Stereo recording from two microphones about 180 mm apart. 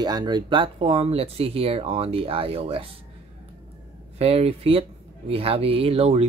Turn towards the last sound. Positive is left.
turn(degrees=-35)  # may be behind; listen again after turning